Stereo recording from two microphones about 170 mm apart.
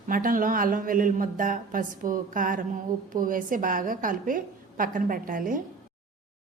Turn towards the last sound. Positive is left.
turn(degrees=-55)  # may be behind; listen again after turning